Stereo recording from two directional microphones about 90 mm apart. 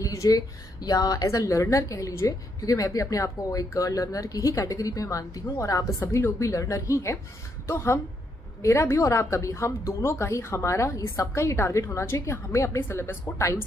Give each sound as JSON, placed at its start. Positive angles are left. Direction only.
{"t": 0.0, "sound": "speech", "side_deg": 40}